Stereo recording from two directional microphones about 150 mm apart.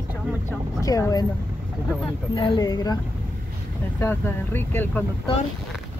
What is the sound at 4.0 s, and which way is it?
Speech, 15° left (ahead or behind).